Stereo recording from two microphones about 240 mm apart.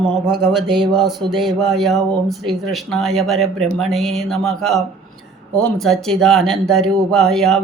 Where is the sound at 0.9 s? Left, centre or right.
Centre.